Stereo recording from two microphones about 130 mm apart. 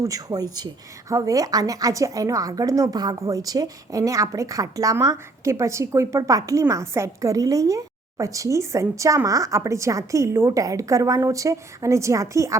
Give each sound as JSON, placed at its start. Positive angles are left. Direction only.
{"t": 0.0, "sound": "a woman's voice", "side_deg": -25}